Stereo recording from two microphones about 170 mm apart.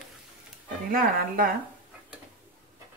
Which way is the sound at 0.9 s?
60° right (ahead or behind).